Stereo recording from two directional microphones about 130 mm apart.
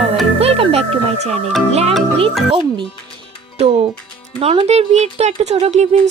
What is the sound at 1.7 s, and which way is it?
Speech, 50° right (ahead or behind).